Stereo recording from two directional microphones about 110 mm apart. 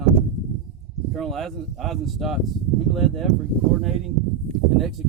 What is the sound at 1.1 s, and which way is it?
Speech, centre (ahead or behind).